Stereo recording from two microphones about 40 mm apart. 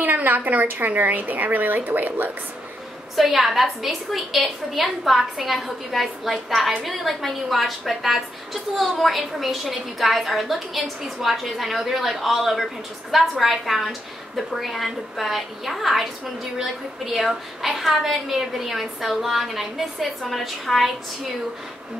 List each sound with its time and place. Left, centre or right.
0.0 s a woman's voice: right
3.2 s a woman's voice: centre